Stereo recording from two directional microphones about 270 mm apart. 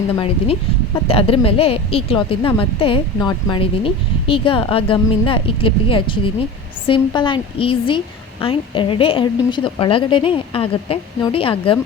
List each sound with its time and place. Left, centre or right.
1.0 s a woman's voice: left